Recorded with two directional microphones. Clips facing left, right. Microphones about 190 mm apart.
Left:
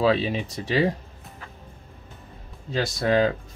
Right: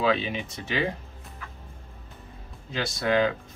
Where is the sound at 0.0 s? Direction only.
35° left (ahead or behind).